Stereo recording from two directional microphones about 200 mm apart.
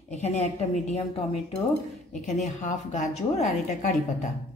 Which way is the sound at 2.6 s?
35° left (ahead or behind).